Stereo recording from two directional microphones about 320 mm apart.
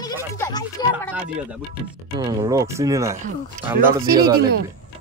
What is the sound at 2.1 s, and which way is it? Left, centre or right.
Speech, centre.